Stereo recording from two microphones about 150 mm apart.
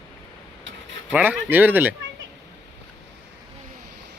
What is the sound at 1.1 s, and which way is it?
Speech, 10° right (ahead or behind).